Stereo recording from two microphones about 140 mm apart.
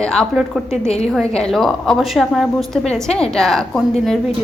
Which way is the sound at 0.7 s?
50° left (ahead or behind).